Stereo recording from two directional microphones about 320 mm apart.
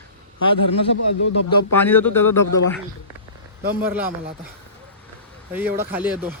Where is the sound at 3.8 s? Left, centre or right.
Centre.